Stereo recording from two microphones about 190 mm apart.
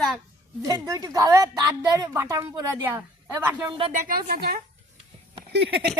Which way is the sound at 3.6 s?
25° right (ahead or behind).